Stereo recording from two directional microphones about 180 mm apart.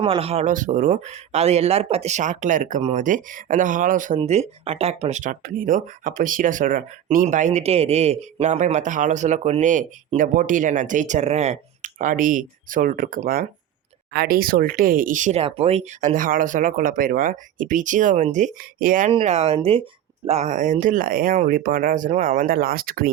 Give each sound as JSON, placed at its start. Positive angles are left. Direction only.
{"t": 0.0, "sound": "speech", "side_deg": -30}
{"t": 19.1, "sound": "speech", "side_deg": -35}